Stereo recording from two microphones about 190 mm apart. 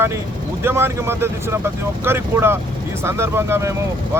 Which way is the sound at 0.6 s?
10° right (ahead or behind).